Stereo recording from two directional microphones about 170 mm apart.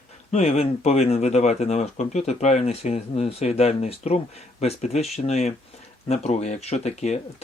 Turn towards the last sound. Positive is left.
turn(degrees=40)  # may be behind; listen again after turning